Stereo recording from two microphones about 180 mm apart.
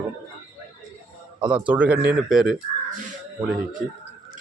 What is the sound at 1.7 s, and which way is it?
Speech, 10° right (ahead or behind).